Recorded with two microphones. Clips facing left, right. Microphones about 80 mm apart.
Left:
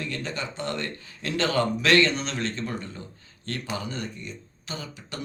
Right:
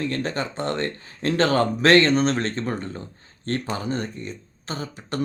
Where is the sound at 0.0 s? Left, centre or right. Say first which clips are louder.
Right 6 dB; right.